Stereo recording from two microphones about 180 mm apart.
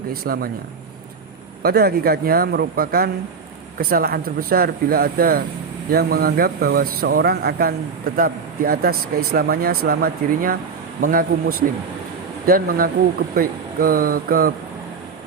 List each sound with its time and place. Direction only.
0.1 s speech: 55° right (ahead or behind)
1.6 s speech: 60° right (ahead or behind)